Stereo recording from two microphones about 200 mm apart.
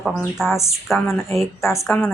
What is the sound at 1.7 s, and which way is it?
Speech, 15° left (ahead or behind).